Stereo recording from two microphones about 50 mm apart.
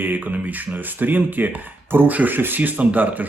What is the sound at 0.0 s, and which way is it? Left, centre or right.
Speech, right.